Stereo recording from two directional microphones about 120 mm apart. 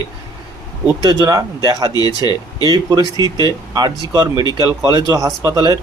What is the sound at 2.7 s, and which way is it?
Speech, 35° right (ahead or behind).